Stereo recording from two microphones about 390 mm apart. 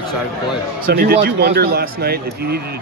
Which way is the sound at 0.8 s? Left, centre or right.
Right.